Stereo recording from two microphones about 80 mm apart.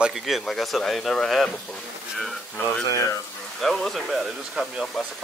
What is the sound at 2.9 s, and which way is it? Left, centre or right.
Speech, left.